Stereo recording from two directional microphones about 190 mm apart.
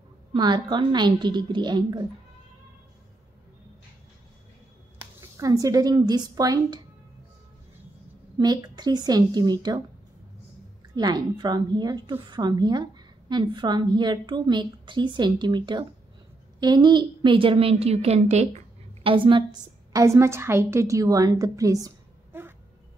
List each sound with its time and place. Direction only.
0.3 s a woman's voice: 25° right (ahead or behind)
5.4 s a woman's voice: 20° right (ahead or behind)
8.4 s a woman's voice: 20° right (ahead or behind)
11.0 s a woman's voice: 20° right (ahead or behind)